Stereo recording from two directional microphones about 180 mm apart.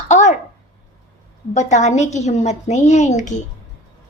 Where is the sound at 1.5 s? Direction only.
40° left (ahead or behind).